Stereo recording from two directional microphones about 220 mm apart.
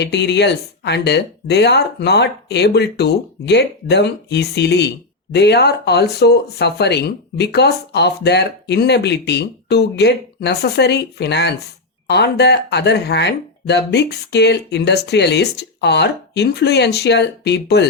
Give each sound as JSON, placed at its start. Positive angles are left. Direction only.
{"t": 0.0, "sound": "speech", "side_deg": 50}